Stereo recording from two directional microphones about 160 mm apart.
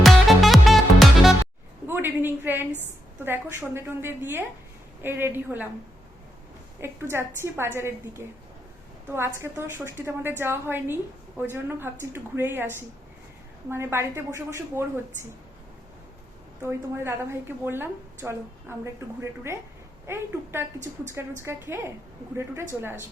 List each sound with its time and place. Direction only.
0.0 s music: centre (ahead or behind)
1.9 s a sound: 15° right (ahead or behind)
3.2 s a woman's voice: 15° right (ahead or behind)
6.8 s a woman's voice: 15° right (ahead or behind)
16.6 s a woman's voice: 15° right (ahead or behind)